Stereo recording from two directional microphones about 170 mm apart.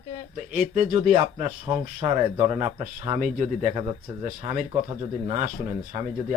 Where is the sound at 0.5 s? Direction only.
45° right (ahead or behind).